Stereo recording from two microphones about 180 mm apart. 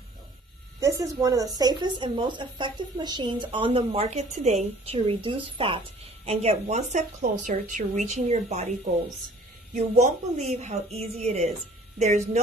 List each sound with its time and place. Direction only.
0.7 s a woman's voice: 20° right (ahead or behind); by 8.6 s 35° right (ahead or behind)
9.8 s a woman's voice: 40° right (ahead or behind)